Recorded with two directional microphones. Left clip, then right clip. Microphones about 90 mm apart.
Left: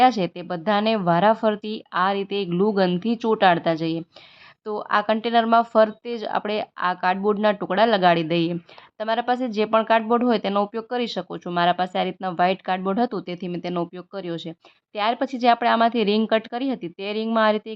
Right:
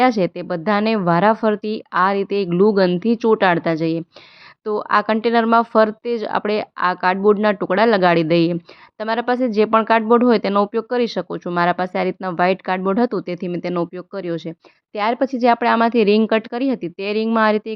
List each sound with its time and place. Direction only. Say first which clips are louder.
0.0 s speech: right 2 dB; 35° right (ahead or behind); by 8.5 s 55° right (ahead or behind)
9.0 s speech: right 3 dB; 45° right (ahead or behind); by 11.5 s 25° right (ahead or behind)
11.5 s speech: right 2 dB; 40° right (ahead or behind)
14.9 s speech: right 4 dB; 40° right (ahead or behind)